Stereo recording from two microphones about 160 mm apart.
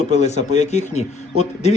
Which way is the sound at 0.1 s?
45° left (ahead or behind).